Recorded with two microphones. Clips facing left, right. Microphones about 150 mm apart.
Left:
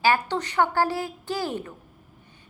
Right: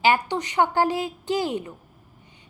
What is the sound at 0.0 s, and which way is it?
A woman's voice, 15° right (ahead or behind).